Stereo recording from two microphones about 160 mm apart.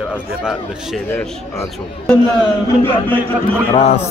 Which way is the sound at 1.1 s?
15° left (ahead or behind).